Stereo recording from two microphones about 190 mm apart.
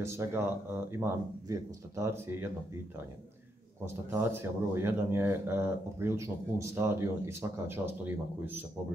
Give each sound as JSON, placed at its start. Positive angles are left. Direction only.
{"t": 0.0, "sound": "speech", "side_deg": -15}
{"t": 3.8, "sound": "speech", "side_deg": -10}